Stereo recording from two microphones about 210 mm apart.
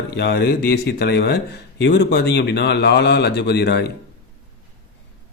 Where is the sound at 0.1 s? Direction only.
55° left (ahead or behind).